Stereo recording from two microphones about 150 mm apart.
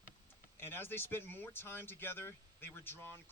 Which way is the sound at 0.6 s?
15° left (ahead or behind).